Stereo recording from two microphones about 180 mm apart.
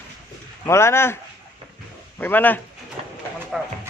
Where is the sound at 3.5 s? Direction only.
Centre (ahead or behind).